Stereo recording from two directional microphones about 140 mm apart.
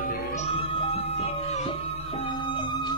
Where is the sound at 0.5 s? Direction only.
40° left (ahead or behind).